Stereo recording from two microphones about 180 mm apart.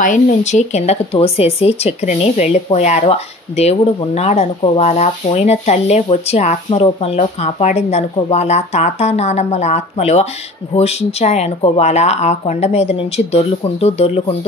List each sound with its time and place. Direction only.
0.0 s speech: 45° left (ahead or behind)